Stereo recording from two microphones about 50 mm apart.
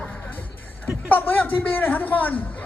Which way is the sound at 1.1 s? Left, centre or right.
Left.